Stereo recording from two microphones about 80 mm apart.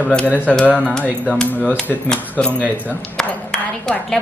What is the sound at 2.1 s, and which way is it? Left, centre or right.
Speech, centre.